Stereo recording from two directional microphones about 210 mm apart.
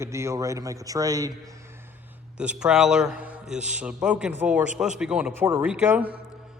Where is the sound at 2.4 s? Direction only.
5° right (ahead or behind).